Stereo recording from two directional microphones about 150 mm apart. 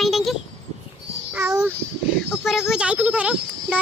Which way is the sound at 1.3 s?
20° right (ahead or behind).